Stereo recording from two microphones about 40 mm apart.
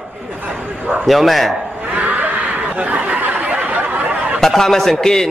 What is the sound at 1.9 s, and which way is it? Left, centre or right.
Snicker, right.